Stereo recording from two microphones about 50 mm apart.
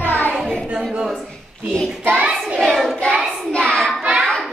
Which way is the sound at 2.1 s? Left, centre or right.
Right.